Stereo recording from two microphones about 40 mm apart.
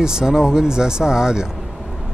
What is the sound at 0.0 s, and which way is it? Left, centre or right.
Speech, centre.